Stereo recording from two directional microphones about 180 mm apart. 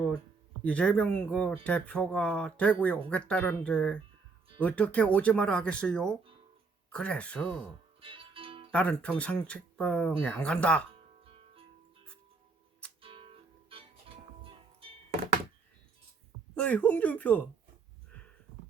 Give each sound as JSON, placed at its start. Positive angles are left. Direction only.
{"t": 0.6, "sound": "speech", "side_deg": 5}
{"t": 8.0, "sound": "music", "side_deg": -30}
{"t": 8.7, "sound": "speech", "side_deg": 5}
{"t": 13.0, "sound": "music", "side_deg": -30}
{"t": 16.6, "sound": "speech", "side_deg": 5}